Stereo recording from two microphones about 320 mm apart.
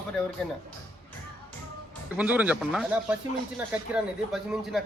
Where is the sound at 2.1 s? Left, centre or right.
Centre.